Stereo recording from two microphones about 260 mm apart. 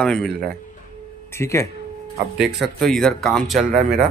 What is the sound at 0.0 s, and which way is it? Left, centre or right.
Speech, centre.